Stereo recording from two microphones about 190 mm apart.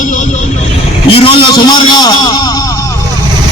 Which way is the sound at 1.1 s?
30° left (ahead or behind).